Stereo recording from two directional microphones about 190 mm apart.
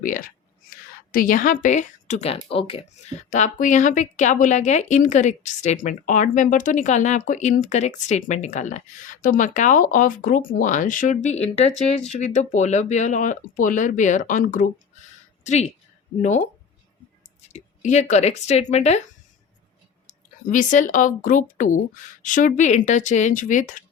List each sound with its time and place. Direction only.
0.0 s a woman's voice: 45° left (ahead or behind)
17.5 s a woman's voice: 35° left (ahead or behind)
20.1 s speech: 45° left (ahead or behind)